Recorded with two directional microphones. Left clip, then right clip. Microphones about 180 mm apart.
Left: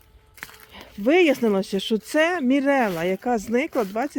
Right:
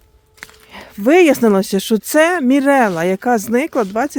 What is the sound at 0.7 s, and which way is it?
Speech, 45° right (ahead or behind).